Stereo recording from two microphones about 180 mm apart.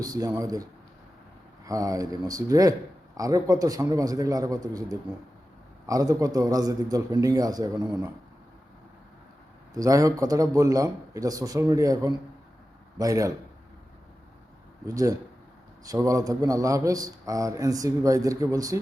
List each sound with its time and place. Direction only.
0.0 s a man's voice: 20° right (ahead or behind)
9.7 s a man's voice: 20° right (ahead or behind)
14.8 s a man's voice: 20° right (ahead or behind)